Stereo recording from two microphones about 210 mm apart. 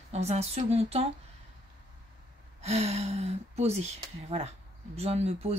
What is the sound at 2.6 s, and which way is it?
Speech, 30° right (ahead or behind).